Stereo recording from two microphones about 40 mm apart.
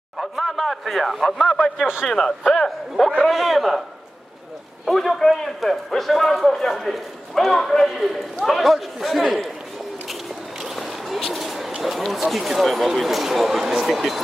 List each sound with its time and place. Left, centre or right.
0.2 s speech: centre
3.2 s a man's voice: centre
4.9 s a man's voice: centre
7.9 s a man's voice: centre
10.6 s a sound: centre
11.4 s bird: centre
11.8 s a man's voice: centre